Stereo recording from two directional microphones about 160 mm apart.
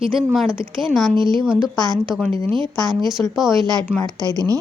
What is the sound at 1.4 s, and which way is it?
Speech, centre (ahead or behind).